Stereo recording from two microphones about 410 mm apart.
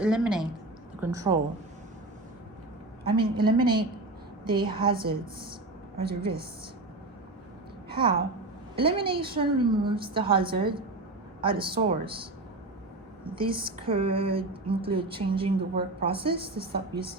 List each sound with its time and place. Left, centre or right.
0.0 s a woman's voice: centre
3.2 s speech: centre
6.0 s speech: centre
7.9 s a sound: centre
8.7 s speech: centre
16.7 s speech: right